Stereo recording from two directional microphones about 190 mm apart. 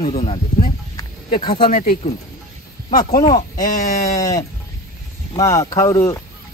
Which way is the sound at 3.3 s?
45° left (ahead or behind).